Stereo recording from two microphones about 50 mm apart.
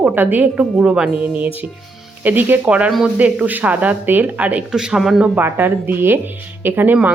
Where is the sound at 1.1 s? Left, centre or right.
Right.